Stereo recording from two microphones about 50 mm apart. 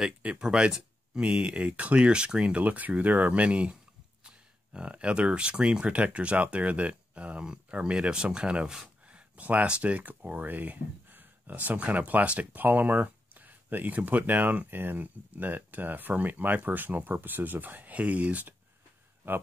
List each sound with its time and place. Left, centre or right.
0.2 s speech: centre
7.4 s speech: centre
8.8 s speech: right